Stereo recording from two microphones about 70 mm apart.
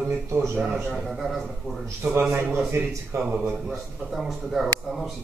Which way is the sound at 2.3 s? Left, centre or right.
Right.